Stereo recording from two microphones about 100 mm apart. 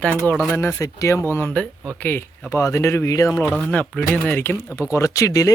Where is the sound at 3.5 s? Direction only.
10° left (ahead or behind).